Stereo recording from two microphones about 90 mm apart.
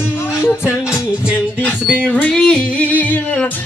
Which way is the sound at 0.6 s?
10° right (ahead or behind).